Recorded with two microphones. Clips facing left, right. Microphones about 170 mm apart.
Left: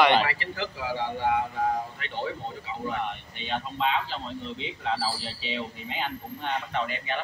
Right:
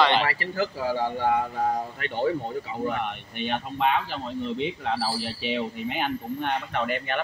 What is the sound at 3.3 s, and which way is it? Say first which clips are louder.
Speech: right 4 dB; 60° right (ahead or behind).